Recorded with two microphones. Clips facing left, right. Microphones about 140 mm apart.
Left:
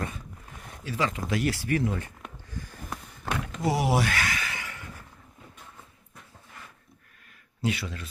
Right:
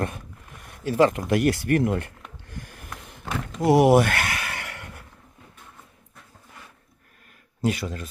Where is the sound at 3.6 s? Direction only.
55° right (ahead or behind).